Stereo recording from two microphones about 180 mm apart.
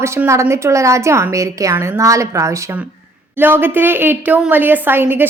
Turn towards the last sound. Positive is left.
turn(degrees=-10)  # may be behind; listen again after turning